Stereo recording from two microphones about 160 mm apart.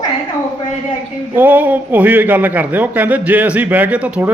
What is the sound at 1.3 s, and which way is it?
A man's voice, 10° right (ahead or behind).